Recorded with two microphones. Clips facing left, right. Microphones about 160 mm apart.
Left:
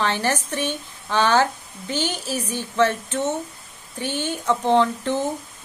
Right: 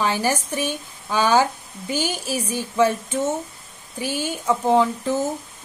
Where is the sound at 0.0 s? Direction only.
10° right (ahead or behind).